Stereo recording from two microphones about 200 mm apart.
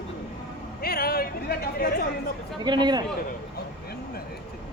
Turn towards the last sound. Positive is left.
turn(degrees=-20)  # may be behind; listen again after turning